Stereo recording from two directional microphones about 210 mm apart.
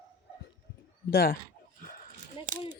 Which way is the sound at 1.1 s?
45° left (ahead or behind).